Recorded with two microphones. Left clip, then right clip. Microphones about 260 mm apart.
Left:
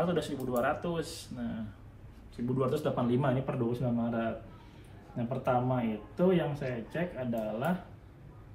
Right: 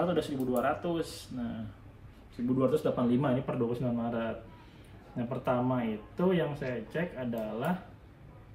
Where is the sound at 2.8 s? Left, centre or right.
Centre.